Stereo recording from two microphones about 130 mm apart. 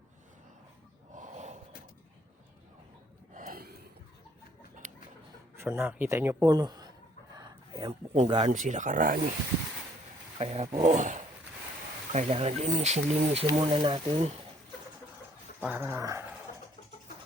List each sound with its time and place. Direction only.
1.1 s gasp: 70° right (ahead or behind)
3.3 s a sound: 90° right
5.5 s speech: 15° right (ahead or behind)
6.5 s speech: 30° right (ahead or behind)
7.3 s a sound: 30° right (ahead or behind)
7.9 s speech: 55° right (ahead or behind)
8.5 s speech: 80° right
10.3 s speech: 50° right (ahead or behind)
10.9 s a sound: 75° right (ahead or behind)
12.1 s speech: 50° right (ahead or behind)
13.5 s speech: 40° right (ahead or behind)
15.6 s speech: 15° right (ahead or behind)